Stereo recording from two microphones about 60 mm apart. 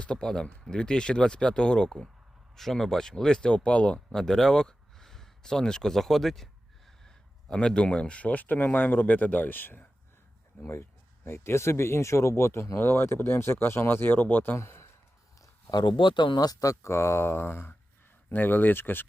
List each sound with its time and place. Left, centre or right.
0.0 s speech: centre
4.1 s a sound: centre
7.5 s speech: centre; by 9.8 s left
10.6 s speech: left
16.4 s speech: left
16.9 s speech: left